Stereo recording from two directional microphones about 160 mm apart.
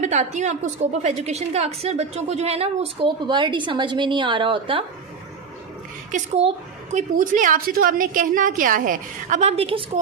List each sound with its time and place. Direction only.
0.0 s a woman's voice: 45° right (ahead or behind)
6.1 s a woman's voice: 45° right (ahead or behind)